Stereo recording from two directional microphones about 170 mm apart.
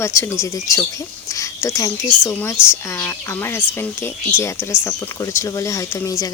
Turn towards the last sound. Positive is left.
turn(degrees=20)  # may be behind; listen again after turning